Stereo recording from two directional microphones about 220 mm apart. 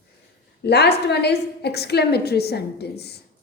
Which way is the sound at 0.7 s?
50° left (ahead or behind).